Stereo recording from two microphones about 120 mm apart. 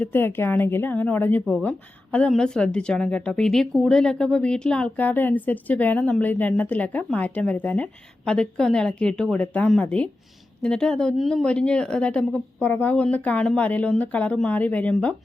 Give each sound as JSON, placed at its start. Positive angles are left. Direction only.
{"t": 0.0, "sound": "a woman's voice", "side_deg": 15}